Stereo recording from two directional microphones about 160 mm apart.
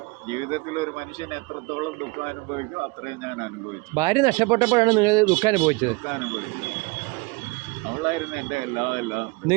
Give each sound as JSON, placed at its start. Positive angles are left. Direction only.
{"t": 0.3, "sound": "speech", "side_deg": -35}
{"t": 3.9, "sound": "speech", "side_deg": -20}
{"t": 8.0, "sound": "speech", "side_deg": -35}